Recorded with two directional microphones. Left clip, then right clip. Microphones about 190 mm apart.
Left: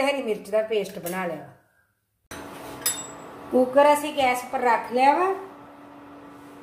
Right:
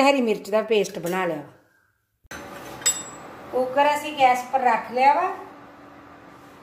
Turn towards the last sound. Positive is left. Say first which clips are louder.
# right 1 dB
turn(degrees=60)  # may be behind; listen again after turning